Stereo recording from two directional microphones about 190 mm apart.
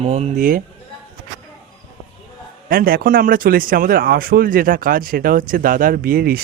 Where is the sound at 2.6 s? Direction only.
50° right (ahead or behind).